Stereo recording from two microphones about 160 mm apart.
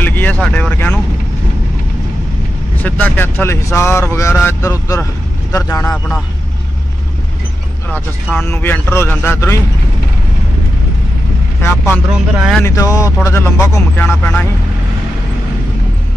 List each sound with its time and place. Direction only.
0.0 s vehicle: 10° left (ahead or behind)
0.4 s speech: 10° left (ahead or behind)
2.8 s speech: 10° left (ahead or behind)
8.3 s speech: 5° left (ahead or behind)
11.6 s speech: 15° left (ahead or behind)
12.4 s a sound: centre (ahead or behind)
12.6 s speech: 20° left (ahead or behind)